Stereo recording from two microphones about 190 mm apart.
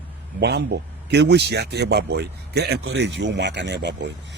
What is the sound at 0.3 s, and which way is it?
Speech, 60° right (ahead or behind).